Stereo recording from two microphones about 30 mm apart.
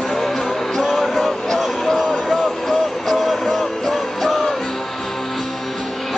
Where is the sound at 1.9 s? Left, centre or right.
Left.